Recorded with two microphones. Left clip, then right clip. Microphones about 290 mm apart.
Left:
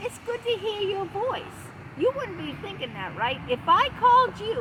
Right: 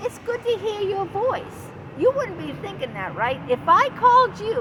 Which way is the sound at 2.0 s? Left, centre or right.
Right.